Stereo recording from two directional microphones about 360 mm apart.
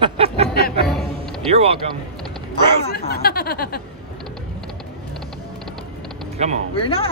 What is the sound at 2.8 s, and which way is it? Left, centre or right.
Speech, left.